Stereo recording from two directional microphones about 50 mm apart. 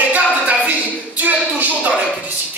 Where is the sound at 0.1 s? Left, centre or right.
Right.